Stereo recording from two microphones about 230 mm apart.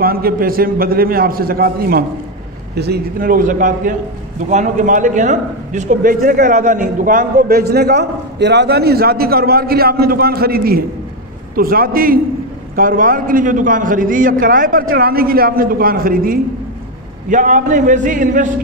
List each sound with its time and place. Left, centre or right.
0.0 s a man's voice: right